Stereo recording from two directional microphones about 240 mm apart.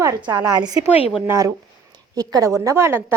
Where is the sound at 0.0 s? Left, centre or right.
Centre.